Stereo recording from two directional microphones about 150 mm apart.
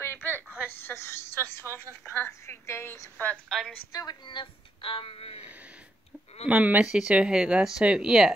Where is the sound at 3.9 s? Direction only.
25° left (ahead or behind).